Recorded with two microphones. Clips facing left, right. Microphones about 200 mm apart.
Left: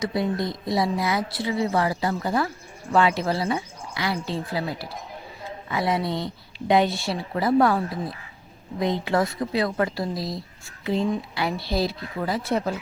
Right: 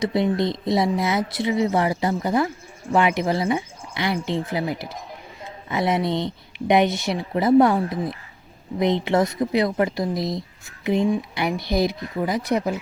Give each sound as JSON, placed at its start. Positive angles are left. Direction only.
{"t": 0.0, "sound": "speech", "side_deg": -25}